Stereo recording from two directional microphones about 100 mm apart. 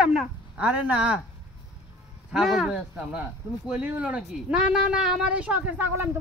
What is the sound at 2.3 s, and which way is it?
Speech, 5° right (ahead or behind).